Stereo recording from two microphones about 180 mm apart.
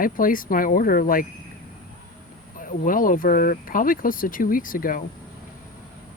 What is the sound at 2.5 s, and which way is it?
Speech, 50° left (ahead or behind).